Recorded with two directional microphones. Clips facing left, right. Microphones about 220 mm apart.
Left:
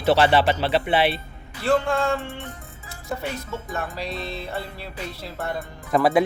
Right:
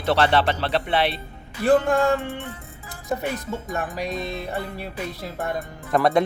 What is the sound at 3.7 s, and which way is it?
Music, 15° right (ahead or behind).